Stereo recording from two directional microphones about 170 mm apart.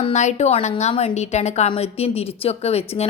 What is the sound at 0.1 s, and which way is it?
A woman's voice, 45° left (ahead or behind).